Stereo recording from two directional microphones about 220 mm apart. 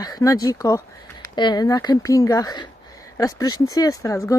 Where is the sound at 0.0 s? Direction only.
15° left (ahead or behind).